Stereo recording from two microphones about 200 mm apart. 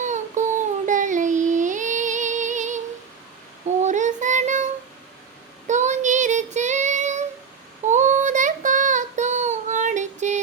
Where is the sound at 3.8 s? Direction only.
35° right (ahead or behind).